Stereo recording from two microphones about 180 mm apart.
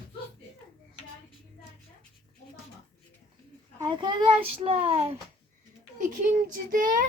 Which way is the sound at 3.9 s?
25° right (ahead or behind).